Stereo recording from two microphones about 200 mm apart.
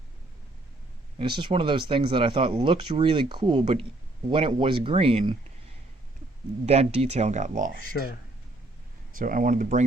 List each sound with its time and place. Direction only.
1.2 s speech: 25° right (ahead or behind)
6.7 s speech: 30° right (ahead or behind)
9.1 s speech: 45° right (ahead or behind)